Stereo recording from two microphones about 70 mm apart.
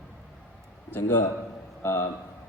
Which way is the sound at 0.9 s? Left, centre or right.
Left.